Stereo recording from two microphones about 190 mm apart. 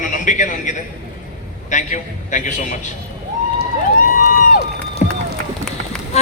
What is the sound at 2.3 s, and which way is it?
Speech, 40° left (ahead or behind).